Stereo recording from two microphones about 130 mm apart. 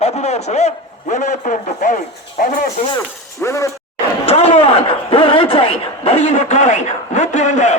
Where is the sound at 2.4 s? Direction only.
90° left.